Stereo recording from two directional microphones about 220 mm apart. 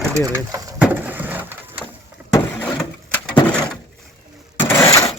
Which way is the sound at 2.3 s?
15° left (ahead or behind).